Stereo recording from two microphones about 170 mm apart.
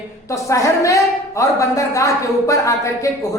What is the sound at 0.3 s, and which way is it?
A woman's voice, 20° left (ahead or behind).